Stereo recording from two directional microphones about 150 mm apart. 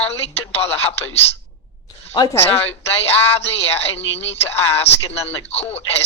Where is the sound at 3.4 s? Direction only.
40° left (ahead or behind).